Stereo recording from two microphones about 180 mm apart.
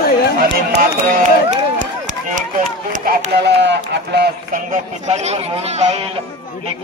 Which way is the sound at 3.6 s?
70° right (ahead or behind).